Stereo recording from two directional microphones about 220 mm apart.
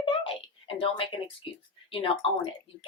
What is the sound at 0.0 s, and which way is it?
Speech, 25° left (ahead or behind).